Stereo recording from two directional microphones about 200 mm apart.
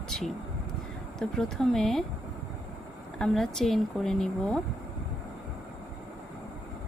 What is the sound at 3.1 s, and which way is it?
Speech, 5° left (ahead or behind).